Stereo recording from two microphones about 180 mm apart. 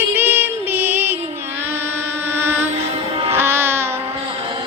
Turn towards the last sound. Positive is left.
turn(degrees=-15)  # may be behind; listen again after turning